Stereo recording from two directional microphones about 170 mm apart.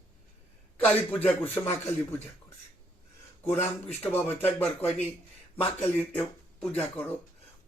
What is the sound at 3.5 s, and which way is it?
Speech, 40° left (ahead or behind).